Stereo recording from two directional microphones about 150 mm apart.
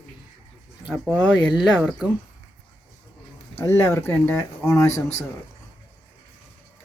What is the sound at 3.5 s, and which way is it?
Speech, 15° left (ahead or behind).